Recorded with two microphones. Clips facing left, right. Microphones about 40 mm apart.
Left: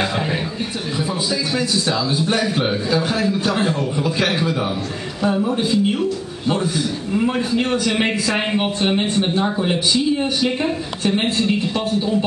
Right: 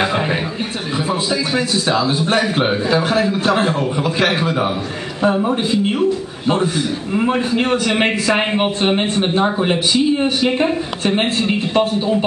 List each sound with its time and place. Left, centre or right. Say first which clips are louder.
1.5 s a man's voice: right 3 dB; right